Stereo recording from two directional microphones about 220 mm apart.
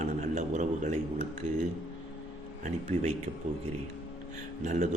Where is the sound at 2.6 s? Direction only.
30° right (ahead or behind).